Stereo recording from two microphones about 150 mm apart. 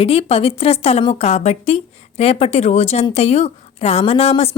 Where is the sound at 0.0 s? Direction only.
40° left (ahead or behind).